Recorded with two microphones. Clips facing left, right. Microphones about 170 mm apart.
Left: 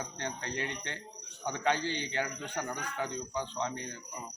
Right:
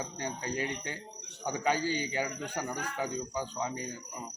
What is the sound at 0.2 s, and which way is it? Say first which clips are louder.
Speech: right 3 dB; 10° right (ahead or behind).